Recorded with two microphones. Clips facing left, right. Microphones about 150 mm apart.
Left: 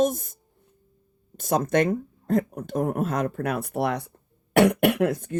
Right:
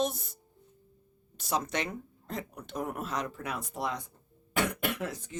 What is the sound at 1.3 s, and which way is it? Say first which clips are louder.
Speech: left 10 dB; 50° left (ahead or behind).